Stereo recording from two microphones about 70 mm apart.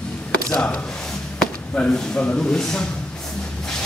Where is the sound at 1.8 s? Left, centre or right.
Centre.